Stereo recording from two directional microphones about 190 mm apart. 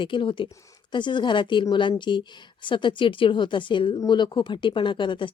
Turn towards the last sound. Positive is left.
turn(degrees=25)  # may be behind; listen again after turning